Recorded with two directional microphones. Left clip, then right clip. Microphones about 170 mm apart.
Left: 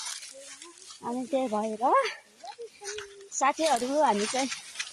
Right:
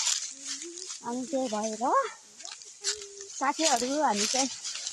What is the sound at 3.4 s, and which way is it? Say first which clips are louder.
Speech: left 2 dB; 45° left (ahead or behind).